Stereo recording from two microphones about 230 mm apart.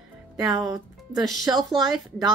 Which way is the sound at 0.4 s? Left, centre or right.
Centre.